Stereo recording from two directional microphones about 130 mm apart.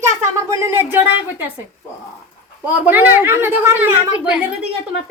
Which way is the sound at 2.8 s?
15° right (ahead or behind).